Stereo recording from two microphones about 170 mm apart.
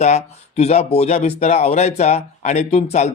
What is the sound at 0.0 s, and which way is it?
Speech, 40° left (ahead or behind).